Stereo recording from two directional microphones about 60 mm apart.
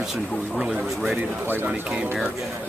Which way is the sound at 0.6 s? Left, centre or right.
Centre.